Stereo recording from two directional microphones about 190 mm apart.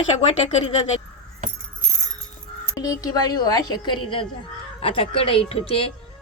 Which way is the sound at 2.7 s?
20° left (ahead or behind).